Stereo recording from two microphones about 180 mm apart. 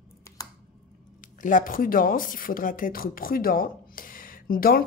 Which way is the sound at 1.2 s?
45° left (ahead or behind).